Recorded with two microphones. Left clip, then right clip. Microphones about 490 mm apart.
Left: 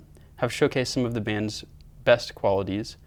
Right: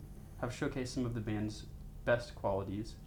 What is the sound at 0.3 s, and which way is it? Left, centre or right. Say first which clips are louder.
Speech: left 15 dB; left.